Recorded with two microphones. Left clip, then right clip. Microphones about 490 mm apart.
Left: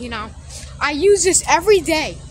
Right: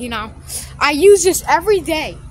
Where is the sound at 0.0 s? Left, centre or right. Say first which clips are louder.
Right 3 dB; right.